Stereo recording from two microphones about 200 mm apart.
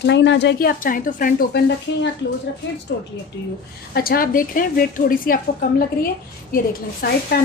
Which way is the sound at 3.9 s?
50° left (ahead or behind).